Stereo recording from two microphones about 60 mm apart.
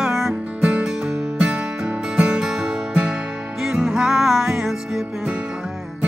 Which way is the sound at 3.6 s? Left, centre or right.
Centre.